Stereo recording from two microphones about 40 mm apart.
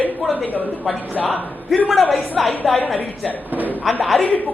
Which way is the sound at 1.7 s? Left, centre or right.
Centre.